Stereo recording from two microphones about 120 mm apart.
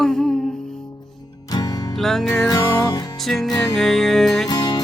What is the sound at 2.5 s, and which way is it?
Music, 30° left (ahead or behind).